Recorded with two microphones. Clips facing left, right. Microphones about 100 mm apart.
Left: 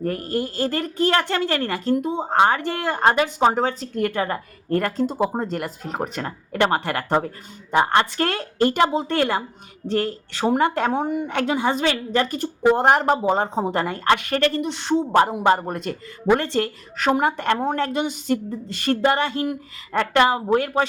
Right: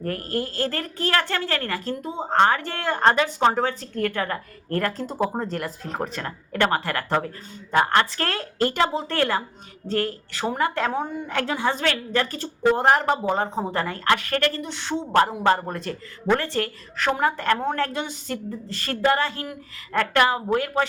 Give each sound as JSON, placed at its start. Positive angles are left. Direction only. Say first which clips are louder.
{"t": 0.0, "sound": "speech", "louder": "left 3 dB", "side_deg": 15}
{"t": 4.8, "sound": "a woman's voice", "louder": "left 2 dB", "side_deg": 10}